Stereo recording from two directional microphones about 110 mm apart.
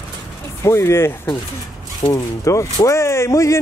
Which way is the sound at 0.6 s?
25° left (ahead or behind).